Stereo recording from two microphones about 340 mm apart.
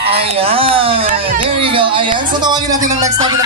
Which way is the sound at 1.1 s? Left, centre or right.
Right.